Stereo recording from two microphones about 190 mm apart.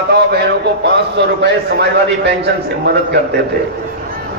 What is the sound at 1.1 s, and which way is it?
Speech, 65° right (ahead or behind).